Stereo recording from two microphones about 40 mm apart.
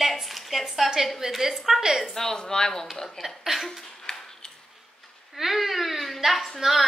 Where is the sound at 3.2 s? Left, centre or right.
Centre.